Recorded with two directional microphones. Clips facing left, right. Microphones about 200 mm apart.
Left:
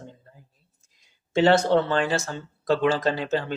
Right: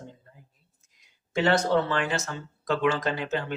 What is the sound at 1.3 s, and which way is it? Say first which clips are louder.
Speech: left 4 dB; 30° left (ahead or behind).